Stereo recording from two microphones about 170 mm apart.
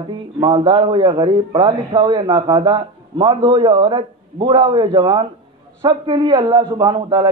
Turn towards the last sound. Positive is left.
turn(degrees=-25)  # may be behind; listen again after turning